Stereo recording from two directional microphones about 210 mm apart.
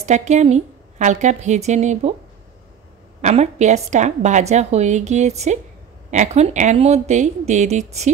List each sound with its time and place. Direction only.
0.0 s a woman's voice: 35° right (ahead or behind)
3.2 s a woman's voice: 35° right (ahead or behind)